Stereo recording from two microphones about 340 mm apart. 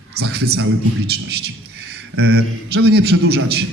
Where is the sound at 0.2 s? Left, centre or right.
Right.